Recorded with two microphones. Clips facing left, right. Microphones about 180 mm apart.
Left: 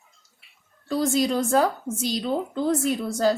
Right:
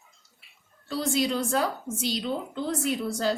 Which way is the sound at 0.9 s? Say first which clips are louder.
Left 4 dB; 45° left (ahead or behind).